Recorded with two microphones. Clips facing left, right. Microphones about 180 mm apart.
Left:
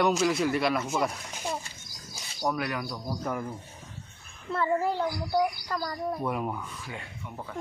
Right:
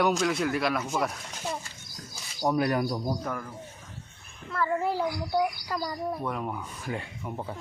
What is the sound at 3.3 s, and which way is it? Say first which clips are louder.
Speech: left 2 dB; 5° left (ahead or behind).